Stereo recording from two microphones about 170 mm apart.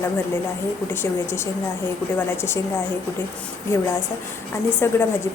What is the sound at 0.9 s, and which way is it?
Speech, 15° left (ahead or behind).